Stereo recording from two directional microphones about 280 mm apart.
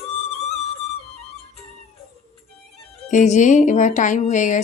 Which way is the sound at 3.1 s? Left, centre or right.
Left.